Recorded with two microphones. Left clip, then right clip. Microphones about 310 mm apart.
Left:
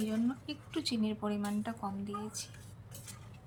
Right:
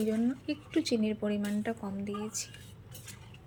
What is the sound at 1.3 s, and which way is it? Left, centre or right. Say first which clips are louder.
Speech: right 4 dB; centre.